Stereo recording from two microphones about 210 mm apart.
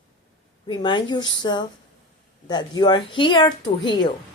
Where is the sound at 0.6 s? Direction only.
20° left (ahead or behind).